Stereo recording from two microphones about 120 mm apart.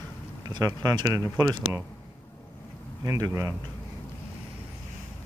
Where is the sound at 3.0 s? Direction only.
25° right (ahead or behind).